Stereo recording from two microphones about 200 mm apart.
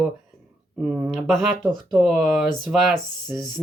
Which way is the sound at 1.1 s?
Centre (ahead or behind).